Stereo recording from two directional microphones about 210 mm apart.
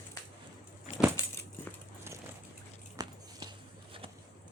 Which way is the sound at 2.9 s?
20° right (ahead or behind).